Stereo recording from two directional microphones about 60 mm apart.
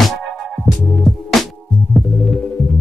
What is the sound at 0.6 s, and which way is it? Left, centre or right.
Music, centre.